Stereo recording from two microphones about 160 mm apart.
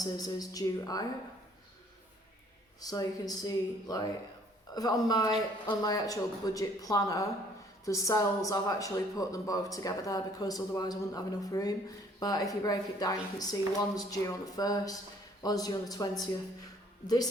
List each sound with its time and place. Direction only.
0.0 s speech: 25° left (ahead or behind)
2.8 s speech: 25° left (ahead or behind)